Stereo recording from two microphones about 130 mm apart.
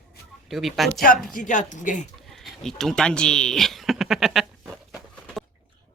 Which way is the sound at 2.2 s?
Centre (ahead or behind).